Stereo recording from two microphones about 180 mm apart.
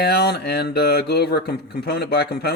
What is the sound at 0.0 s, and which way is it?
Speech, 65° left (ahead or behind).